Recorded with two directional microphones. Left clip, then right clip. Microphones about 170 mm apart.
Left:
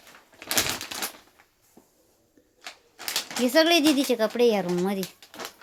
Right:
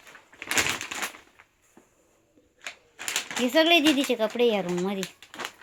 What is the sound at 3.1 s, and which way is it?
Speech, 15° left (ahead or behind).